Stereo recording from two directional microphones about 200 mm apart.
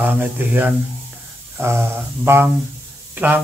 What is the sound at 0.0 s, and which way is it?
Speech, 10° right (ahead or behind).